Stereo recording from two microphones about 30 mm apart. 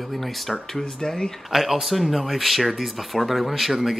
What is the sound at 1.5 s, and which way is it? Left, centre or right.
Speech, centre.